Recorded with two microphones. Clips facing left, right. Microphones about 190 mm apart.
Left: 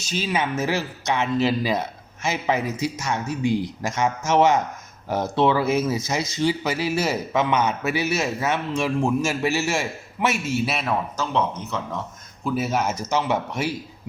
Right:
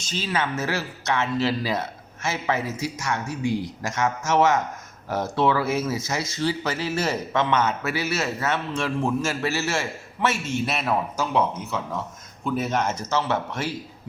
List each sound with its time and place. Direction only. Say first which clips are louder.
0.0 s speech: left 2 dB; 10° left (ahead or behind); by 11.8 s 10° right (ahead or behind)
12.5 s speech: left 1 dB; 5° left (ahead or behind)